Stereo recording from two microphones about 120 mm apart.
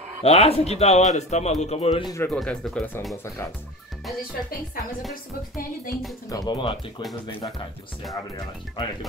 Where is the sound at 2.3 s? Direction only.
Centre (ahead or behind).